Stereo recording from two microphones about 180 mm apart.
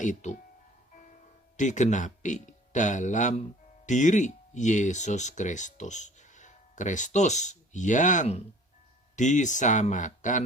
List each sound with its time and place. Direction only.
0.0 s speech: 40° left (ahead or behind)
1.5 s speech: 40° left (ahead or behind)